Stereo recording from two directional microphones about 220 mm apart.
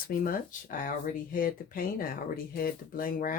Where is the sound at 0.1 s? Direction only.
40° left (ahead or behind).